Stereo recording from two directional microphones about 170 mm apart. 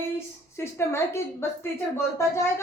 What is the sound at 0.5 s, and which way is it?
A woman's voice, 15° left (ahead or behind).